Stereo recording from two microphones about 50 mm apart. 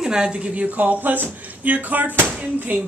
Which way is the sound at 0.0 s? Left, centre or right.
Centre.